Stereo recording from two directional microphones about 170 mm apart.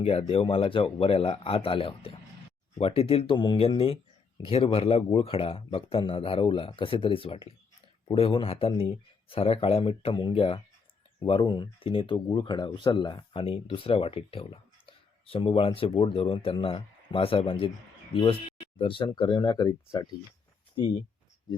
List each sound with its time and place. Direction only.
0.0 s speech: 35° left (ahead or behind)